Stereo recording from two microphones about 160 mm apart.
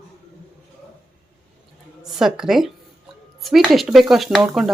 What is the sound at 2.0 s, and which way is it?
Speech, centre (ahead or behind).